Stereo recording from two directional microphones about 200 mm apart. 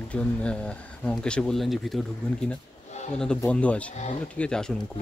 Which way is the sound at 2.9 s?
35° left (ahead or behind).